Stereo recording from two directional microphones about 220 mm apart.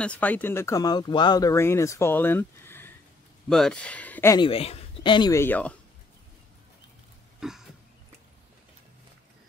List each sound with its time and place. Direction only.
0.0 s speech: 5° left (ahead or behind)
4.5 s speech: 25° left (ahead or behind); by 5.8 s 5° left (ahead or behind)
7.3 s a sound: centre (ahead or behind)